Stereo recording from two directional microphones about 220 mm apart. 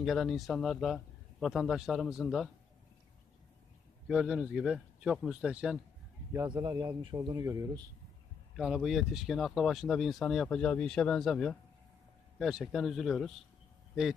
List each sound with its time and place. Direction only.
0.0 s speech: centre (ahead or behind)
4.1 s speech: 5° right (ahead or behind)
6.3 s a man's voice: 20° right (ahead or behind)
8.5 s speech: centre (ahead or behind)